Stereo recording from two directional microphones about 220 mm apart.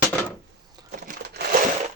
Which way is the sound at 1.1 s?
40° right (ahead or behind).